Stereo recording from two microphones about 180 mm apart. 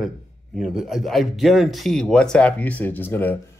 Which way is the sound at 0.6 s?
Centre (ahead or behind).